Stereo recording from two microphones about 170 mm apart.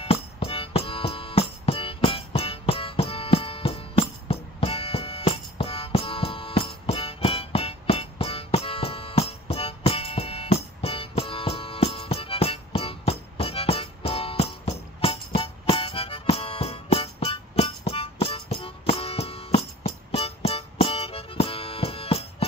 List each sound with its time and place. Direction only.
0.0 s music: 35° left (ahead or behind)